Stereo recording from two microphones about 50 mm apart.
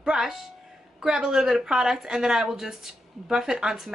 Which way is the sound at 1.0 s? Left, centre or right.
Centre.